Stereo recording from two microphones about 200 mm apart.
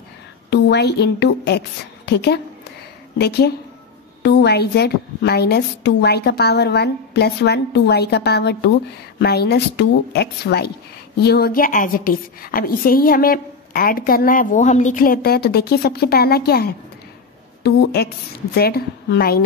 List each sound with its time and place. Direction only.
0.5 s a woman's voice: 55° left (ahead or behind)